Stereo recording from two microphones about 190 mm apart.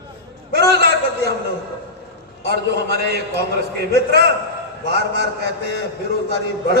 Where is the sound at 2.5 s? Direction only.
60° right (ahead or behind).